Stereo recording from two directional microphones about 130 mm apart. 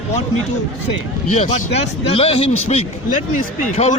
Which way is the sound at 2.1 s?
50° left (ahead or behind).